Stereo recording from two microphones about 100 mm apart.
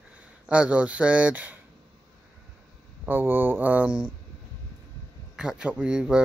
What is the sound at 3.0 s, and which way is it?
Speech, 20° right (ahead or behind).